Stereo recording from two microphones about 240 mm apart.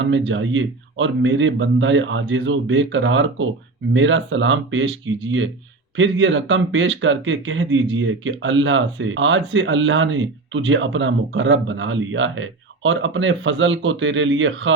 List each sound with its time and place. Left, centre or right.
0.0 s speech: right